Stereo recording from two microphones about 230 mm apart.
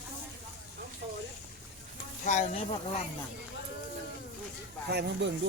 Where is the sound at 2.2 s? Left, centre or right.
Left.